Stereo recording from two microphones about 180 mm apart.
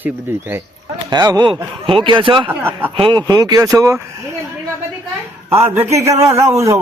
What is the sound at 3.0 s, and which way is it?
Speech, 25° right (ahead or behind).